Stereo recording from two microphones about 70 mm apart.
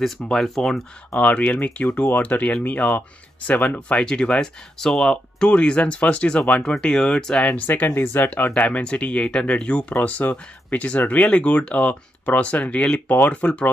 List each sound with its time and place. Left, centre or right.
0.0 s speech: centre
1.2 s speech: left
7.6 s speech: left